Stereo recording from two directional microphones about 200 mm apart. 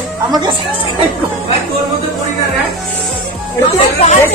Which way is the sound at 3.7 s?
35° left (ahead or behind).